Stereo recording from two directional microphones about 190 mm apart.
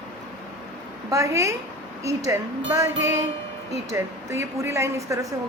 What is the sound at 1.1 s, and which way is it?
A woman's voice, 15° right (ahead or behind).